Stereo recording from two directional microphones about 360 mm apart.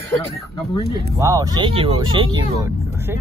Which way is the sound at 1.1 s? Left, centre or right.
Centre.